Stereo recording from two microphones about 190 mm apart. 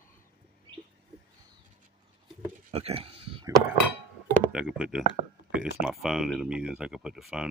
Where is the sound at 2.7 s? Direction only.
30° right (ahead or behind).